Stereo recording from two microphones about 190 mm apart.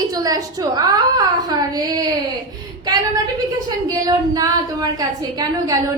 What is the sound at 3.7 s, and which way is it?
A woman's voice, 20° right (ahead or behind).